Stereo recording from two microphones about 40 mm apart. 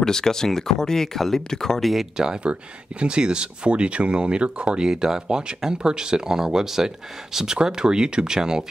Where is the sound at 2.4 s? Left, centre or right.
Right.